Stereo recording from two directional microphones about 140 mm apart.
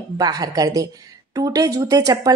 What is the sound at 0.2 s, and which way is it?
Speech, 25° right (ahead or behind).